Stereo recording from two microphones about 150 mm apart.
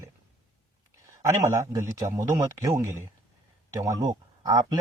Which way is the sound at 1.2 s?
20° right (ahead or behind).